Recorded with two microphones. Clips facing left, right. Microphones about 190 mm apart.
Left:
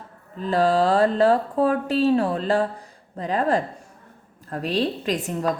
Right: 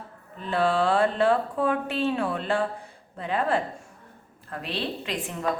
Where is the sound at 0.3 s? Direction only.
40° left (ahead or behind).